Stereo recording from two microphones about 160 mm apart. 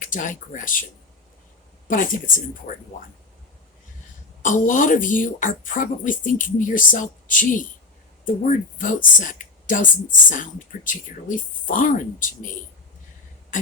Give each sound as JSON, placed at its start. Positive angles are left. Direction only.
{"t": 0.0, "sound": "a woman's voice", "side_deg": 55}
{"t": 1.9, "sound": "a woman's voice", "side_deg": 55}
{"t": 4.4, "sound": "a woman's voice", "side_deg": 55}